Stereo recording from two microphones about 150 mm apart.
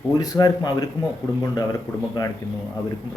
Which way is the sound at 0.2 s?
25° left (ahead or behind).